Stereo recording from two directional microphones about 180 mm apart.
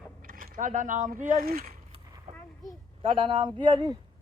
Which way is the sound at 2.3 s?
35° right (ahead or behind).